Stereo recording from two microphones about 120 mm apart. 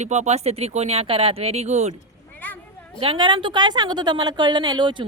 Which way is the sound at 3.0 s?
45° right (ahead or behind).